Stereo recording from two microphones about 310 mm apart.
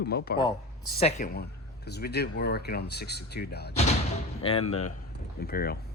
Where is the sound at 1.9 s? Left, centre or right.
Left.